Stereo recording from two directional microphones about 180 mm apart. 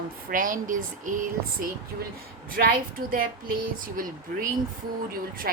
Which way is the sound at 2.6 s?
60° right (ahead or behind).